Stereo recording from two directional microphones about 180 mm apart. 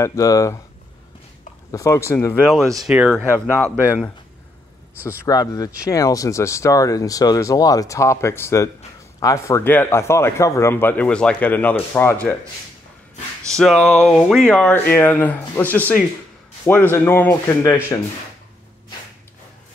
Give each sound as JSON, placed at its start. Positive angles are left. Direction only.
{"t": 0.0, "sound": "speech", "side_deg": 15}
{"t": 1.7, "sound": "speech", "side_deg": 15}
{"t": 2.8, "sound": "speech", "side_deg": -5}
{"t": 5.0, "sound": "speech", "side_deg": 20}
{"t": 13.5, "sound": "speech", "side_deg": 5}